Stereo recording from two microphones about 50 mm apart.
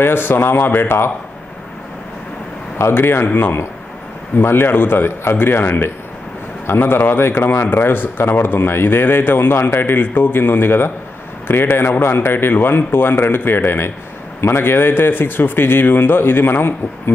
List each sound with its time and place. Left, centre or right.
0.0 s speech: left
2.8 s speech: left
4.4 s speech: left